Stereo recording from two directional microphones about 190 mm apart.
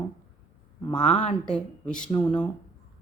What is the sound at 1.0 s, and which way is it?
Speech, 35° left (ahead or behind).